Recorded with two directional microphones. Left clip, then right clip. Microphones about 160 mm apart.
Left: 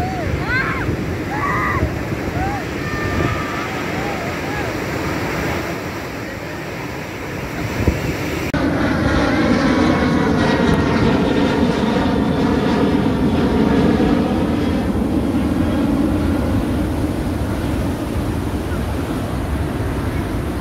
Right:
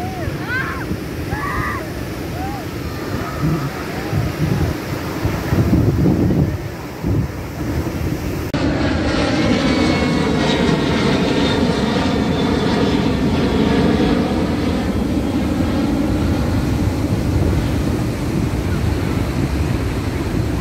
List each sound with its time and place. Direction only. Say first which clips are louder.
8.5 s vehicle: even; 20° right (ahead or behind)